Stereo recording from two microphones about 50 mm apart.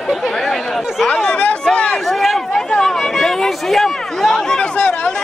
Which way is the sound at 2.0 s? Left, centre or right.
Centre.